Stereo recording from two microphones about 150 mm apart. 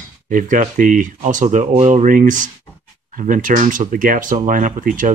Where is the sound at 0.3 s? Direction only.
60° right (ahead or behind).